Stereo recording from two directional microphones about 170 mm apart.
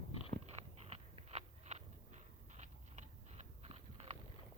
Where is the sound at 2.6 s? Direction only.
40° right (ahead or behind).